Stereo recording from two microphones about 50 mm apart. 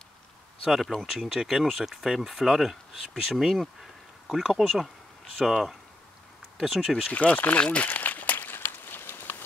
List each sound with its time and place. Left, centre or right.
0.7 s speech: centre
7.1 s speech: left
7.6 s a sound: left